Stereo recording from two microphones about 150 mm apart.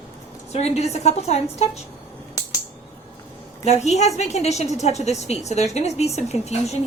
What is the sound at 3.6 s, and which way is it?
A woman's voice, 45° left (ahead or behind).